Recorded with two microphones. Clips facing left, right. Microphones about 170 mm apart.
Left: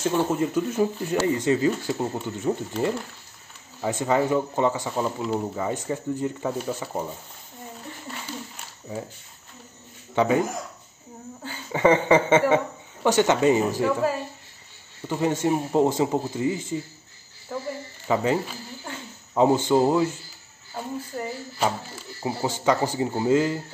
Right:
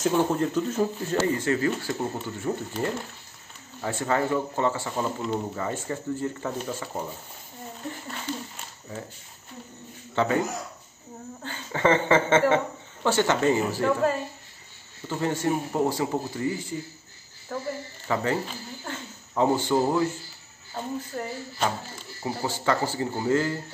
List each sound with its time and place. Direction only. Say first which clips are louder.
0.0 s speech: even; 5° left (ahead or behind)
3.8 s speech: left 3 dB; 15° left (ahead or behind)
8.3 s a sound: right 5 dB; 10° left (ahead or behind)
10.1 s a man's voice: left 3 dB; 15° left (ahead or behind)
11.4 s speech: left 3 dB; 10° left (ahead or behind)
17.5 s speech: left 1 dB; 5° left (ahead or behind)
18.0 s speech: left 4 dB; 15° left (ahead or behind)
20.7 s speech: even; 5° left (ahead or behind)
22.2 s speech: left 3 dB; 20° left (ahead or behind)